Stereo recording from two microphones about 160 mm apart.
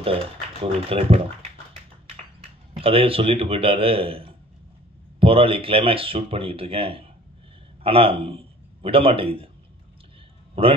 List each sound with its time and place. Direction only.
0.0 s speech: 40° right (ahead or behind)
2.8 s a man's voice: 35° right (ahead or behind)